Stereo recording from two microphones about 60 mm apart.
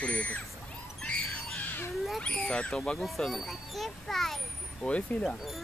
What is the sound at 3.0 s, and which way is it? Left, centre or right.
A child's voice, centre.